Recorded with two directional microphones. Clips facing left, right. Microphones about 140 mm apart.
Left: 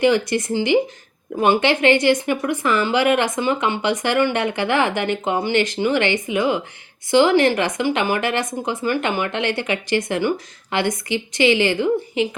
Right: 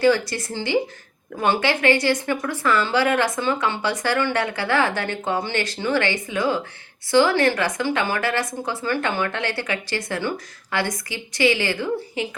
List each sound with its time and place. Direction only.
0.0 s speech: 20° left (ahead or behind)